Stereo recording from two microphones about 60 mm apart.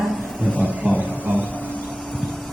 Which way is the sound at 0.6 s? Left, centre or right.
Right.